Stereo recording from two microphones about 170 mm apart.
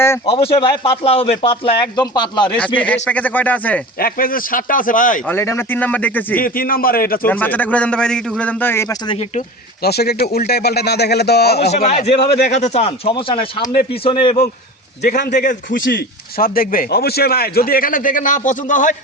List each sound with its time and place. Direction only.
0.3 s a man's voice: 35° left (ahead or behind)
2.7 s a man's voice: 10° left (ahead or behind)
3.9 s speech: 60° left (ahead or behind)
5.2 s a man's voice: 15° left (ahead or behind)
6.4 s speech: 55° left (ahead or behind)
7.3 s a man's voice: 10° left (ahead or behind)
9.0 s a man's voice: 40° left (ahead or behind)
9.8 s a man's voice: 70° left (ahead or behind)
11.7 s a man's voice: 40° left (ahead or behind)
15.3 s a man's voice: 50° left (ahead or behind)
15.8 s speech: 70° left (ahead or behind); by 18.9 s 50° left (ahead or behind)